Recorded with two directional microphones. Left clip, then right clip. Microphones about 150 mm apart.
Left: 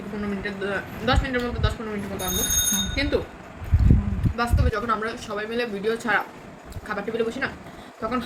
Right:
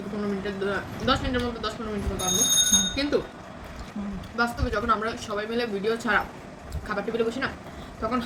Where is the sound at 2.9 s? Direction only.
10° left (ahead or behind).